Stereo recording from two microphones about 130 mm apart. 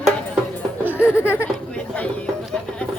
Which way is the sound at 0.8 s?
10° right (ahead or behind).